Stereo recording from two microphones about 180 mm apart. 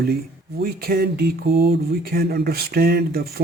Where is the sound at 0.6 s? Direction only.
60° right (ahead or behind).